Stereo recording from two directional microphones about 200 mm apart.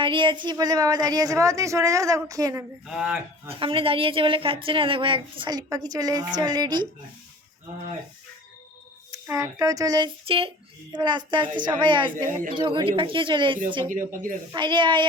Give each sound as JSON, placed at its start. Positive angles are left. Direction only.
{"t": 0.0, "sound": "a woman's voice", "side_deg": -25}
{"t": 2.8, "sound": "speech", "side_deg": -5}
{"t": 3.5, "sound": "a woman's voice", "side_deg": -25}
{"t": 9.1, "sound": "a woman's voice", "side_deg": -15}
{"t": 12.1, "sound": "speech", "side_deg": -45}
{"t": 12.5, "sound": "a woman's voice", "side_deg": -25}
{"t": 13.9, "sound": "speech", "side_deg": -40}
{"t": 14.5, "sound": "a woman's voice", "side_deg": -25}